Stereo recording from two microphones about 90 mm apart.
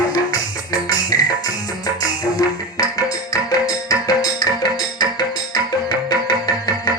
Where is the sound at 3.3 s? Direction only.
45° left (ahead or behind).